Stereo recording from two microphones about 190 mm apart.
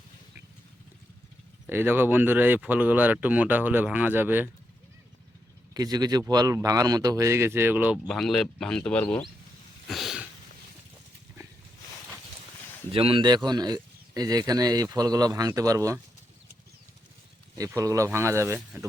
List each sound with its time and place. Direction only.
1.6 s speech: 10° right (ahead or behind)
5.7 s speech: 20° right (ahead or behind)
8.0 s speech: 5° left (ahead or behind)
9.9 s a sound: centre (ahead or behind)
12.9 s speech: 30° right (ahead or behind)
17.6 s speech: 15° right (ahead or behind)